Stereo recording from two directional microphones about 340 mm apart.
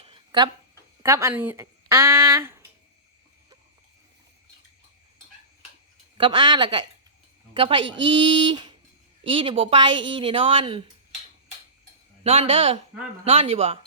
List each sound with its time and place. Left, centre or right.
0.0 s a sound: centre
1.0 s a woman's voice: centre
6.1 s a woman's voice: centre
12.2 s a woman's voice: centre